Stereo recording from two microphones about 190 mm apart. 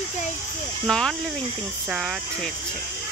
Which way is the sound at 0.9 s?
5° left (ahead or behind).